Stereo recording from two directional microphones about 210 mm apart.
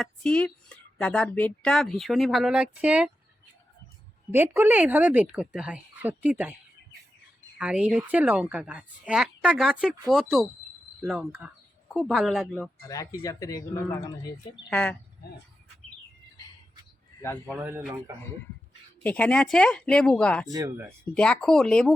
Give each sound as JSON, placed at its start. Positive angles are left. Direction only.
{"t": 0.0, "sound": "speech", "side_deg": 5}
{"t": 4.3, "sound": "speech", "side_deg": -10}
{"t": 7.6, "sound": "speech", "side_deg": -5}
{"t": 12.9, "sound": "speech", "side_deg": 15}
{"t": 17.5, "sound": "speech", "side_deg": -10}
{"t": 19.0, "sound": "speech", "side_deg": 5}
{"t": 20.5, "sound": "speech", "side_deg": -15}
{"t": 21.2, "sound": "speech", "side_deg": 5}